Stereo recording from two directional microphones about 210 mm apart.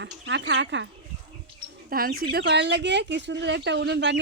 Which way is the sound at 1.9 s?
45° right (ahead or behind).